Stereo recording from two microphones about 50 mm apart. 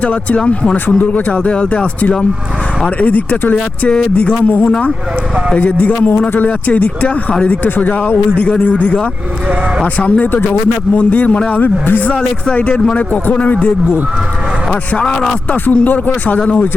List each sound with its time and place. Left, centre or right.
0.0 s speech: left
3.5 s speech: left
11.6 s speech: left
12.1 s speech: left
15.7 s speech: left